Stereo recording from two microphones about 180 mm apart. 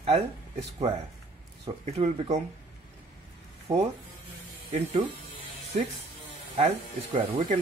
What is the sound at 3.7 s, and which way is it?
Speech, 40° right (ahead or behind).